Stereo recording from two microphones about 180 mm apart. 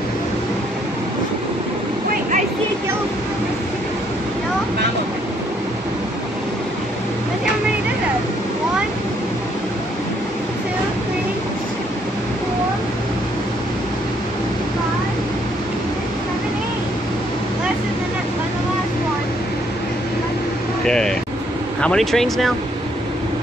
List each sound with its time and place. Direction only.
20.8 s vehicle: 5° left (ahead or behind)
21.8 s speech: centre (ahead or behind)